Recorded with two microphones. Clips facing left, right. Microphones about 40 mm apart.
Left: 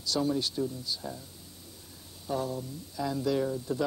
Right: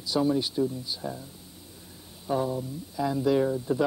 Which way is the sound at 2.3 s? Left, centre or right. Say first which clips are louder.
Right 5 dB; centre.